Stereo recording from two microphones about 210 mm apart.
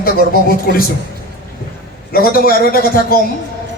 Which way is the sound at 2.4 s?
45° left (ahead or behind).